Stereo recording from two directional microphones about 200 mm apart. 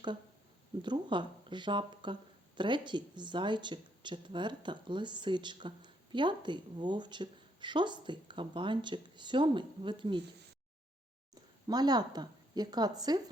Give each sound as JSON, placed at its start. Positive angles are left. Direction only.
{"t": 0.8, "sound": "speech", "side_deg": -20}
{"t": 11.7, "sound": "speech", "side_deg": -20}